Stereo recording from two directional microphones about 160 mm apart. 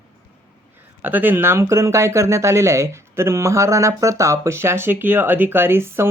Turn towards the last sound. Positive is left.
turn(degrees=-15)  # may be behind; listen again after turning